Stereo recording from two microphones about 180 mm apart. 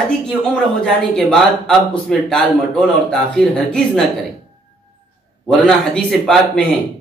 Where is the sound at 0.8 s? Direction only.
5° left (ahead or behind).